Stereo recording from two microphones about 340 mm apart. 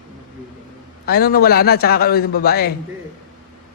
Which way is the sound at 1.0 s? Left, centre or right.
Left.